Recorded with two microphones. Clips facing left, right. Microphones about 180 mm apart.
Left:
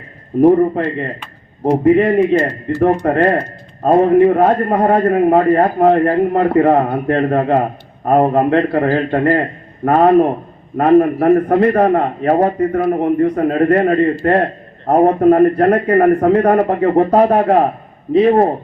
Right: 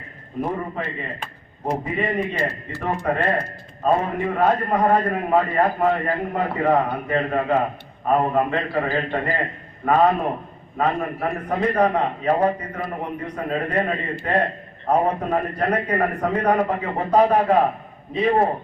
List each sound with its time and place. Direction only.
1.8 s speech: 50° left (ahead or behind)
3.0 s a man's voice: 65° left (ahead or behind)